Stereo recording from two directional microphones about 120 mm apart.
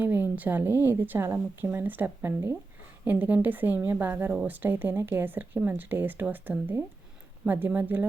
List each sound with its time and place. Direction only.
0.0 s a woman's voice: 15° right (ahead or behind)